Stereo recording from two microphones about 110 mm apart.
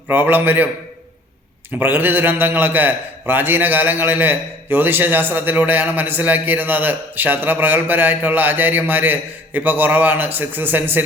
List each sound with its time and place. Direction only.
0.1 s a man's voice: 15° right (ahead or behind)
1.8 s a man's voice: 20° right (ahead or behind)